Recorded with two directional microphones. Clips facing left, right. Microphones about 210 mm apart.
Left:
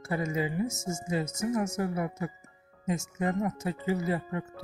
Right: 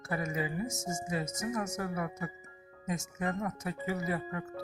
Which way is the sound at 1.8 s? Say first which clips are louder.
Left 5 dB; 25° left (ahead or behind).